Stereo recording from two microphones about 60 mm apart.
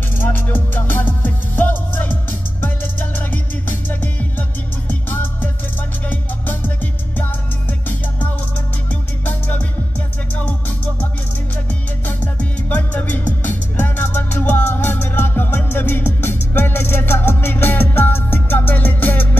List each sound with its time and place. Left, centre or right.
0.2 s music: left
4.0 s music: left
9.2 s music: left
12.1 s music: left